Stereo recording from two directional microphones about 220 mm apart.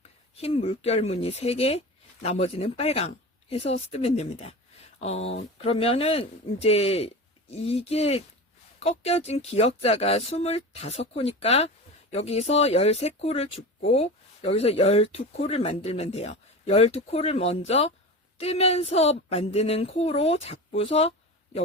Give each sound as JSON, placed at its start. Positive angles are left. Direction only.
{"t": 0.3, "sound": "speech", "side_deg": 25}